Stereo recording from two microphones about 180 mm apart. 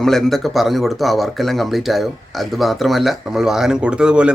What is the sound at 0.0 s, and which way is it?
Speech, centre (ahead or behind).